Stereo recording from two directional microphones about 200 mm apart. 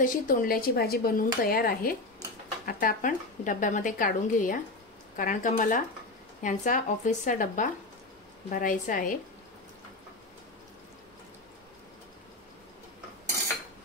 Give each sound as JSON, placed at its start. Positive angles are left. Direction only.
{"t": 0.0, "sound": "a woman's voice", "side_deg": 45}